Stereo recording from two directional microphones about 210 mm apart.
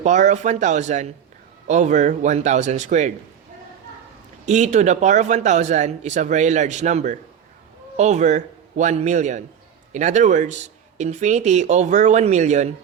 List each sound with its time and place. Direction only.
0.0 s speech: 35° right (ahead or behind)
4.4 s speech: 35° right (ahead or behind)